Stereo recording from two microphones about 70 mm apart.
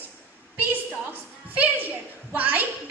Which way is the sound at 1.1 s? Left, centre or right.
Right.